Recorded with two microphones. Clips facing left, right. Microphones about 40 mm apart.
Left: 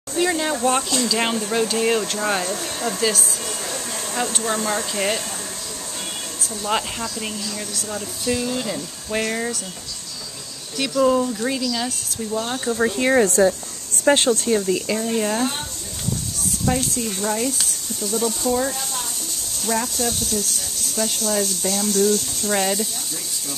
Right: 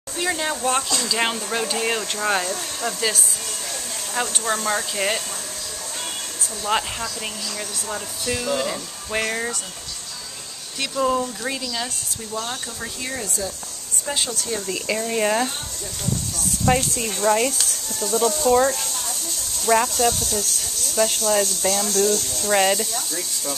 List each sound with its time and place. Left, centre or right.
0.1 s speech: centre
6.6 s speech: centre
8.6 s speech: centre
10.8 s speech: centre
12.7 s speech: left
13.1 s speech: left
14.9 s speech: centre
16.7 s speech: right
17.2 s speech: centre
20.0 s speech: centre
22.5 s speech: centre